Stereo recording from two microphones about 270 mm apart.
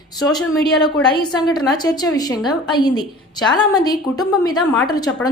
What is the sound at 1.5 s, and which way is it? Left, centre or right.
A woman's voice, centre.